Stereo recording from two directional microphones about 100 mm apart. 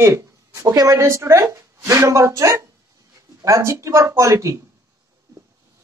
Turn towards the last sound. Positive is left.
turn(degrees=-30)  # may be behind; listen again after turning